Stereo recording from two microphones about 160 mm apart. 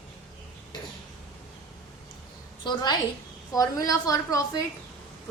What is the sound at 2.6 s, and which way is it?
A woman's voice, 25° left (ahead or behind).